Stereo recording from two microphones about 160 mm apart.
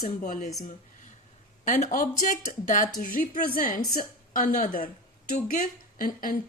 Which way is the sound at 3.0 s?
60° left (ahead or behind).